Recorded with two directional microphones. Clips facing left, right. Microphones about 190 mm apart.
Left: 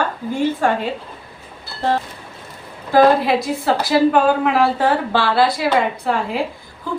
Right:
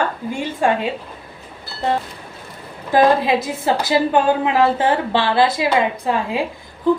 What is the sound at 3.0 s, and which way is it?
A woman's voice, 20° right (ahead or behind).